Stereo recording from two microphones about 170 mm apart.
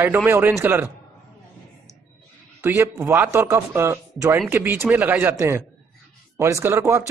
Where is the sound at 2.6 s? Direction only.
15° right (ahead or behind).